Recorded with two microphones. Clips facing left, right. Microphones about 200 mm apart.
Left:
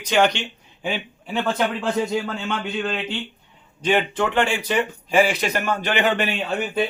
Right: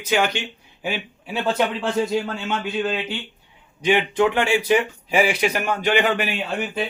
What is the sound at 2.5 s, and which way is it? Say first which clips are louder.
A man's voice: right 2 dB; 5° right (ahead or behind).